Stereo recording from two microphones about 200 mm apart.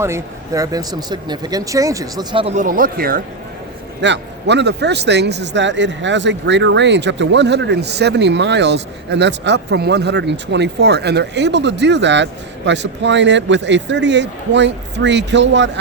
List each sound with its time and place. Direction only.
0.0 s speech: 15° right (ahead or behind); by 3.2 s 45° right (ahead or behind)
4.0 s speech: 60° right (ahead or behind)